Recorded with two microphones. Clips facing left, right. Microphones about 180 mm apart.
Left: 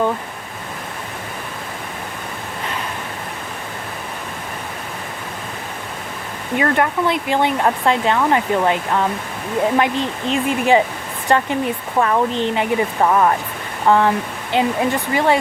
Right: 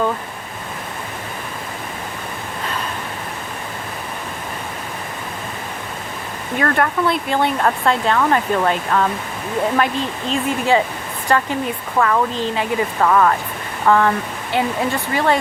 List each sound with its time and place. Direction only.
6.6 s speech: 20° left (ahead or behind)